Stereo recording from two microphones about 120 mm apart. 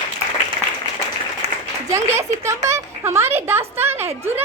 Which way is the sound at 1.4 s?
65° right (ahead or behind).